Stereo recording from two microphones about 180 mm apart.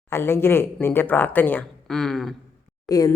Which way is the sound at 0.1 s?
15° left (ahead or behind).